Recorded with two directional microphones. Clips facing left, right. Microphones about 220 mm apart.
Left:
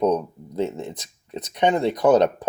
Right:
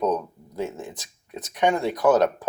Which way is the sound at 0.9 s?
20° left (ahead or behind).